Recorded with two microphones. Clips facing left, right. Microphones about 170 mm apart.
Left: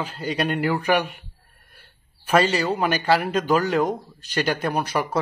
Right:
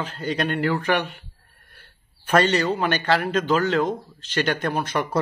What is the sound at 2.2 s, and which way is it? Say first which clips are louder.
Speech: even; 10° left (ahead or behind).